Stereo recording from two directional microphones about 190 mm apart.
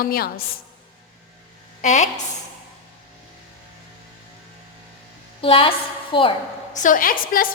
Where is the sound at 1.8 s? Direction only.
40° left (ahead or behind).